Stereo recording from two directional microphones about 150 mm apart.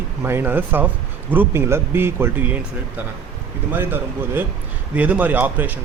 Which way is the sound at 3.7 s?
15° right (ahead or behind).